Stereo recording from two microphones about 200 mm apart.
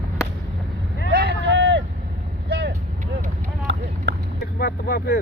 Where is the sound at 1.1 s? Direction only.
55° right (ahead or behind).